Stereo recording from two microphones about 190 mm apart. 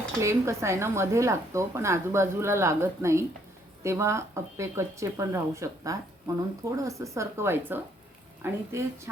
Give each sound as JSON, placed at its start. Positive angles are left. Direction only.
{"t": 0.2, "sound": "speech", "side_deg": -15}